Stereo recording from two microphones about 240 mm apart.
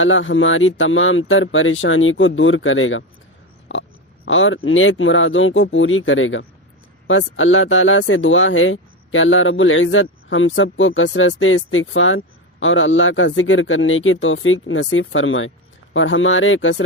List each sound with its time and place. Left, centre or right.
0.0 s speech: left